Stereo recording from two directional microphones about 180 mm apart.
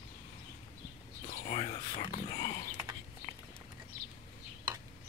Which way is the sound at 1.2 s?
45° left (ahead or behind).